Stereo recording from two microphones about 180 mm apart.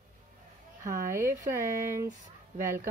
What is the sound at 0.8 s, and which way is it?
A woman's voice, 45° right (ahead or behind).